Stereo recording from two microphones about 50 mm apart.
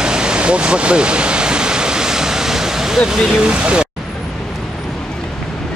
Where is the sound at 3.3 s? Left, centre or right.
Centre.